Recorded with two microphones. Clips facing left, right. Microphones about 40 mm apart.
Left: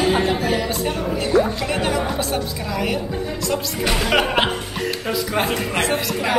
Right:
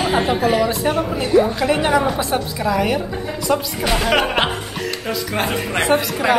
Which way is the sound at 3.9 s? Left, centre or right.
Centre.